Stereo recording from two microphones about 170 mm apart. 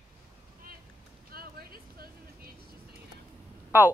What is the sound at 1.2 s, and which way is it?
Vehicle, 60° right (ahead or behind).